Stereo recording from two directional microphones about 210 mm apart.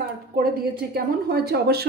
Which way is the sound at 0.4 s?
45° right (ahead or behind).